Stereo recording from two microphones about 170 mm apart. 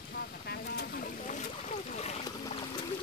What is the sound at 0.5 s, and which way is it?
Boat, 65° left (ahead or behind).